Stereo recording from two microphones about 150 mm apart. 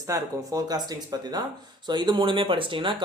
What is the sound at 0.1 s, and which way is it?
Speech, 25° right (ahead or behind).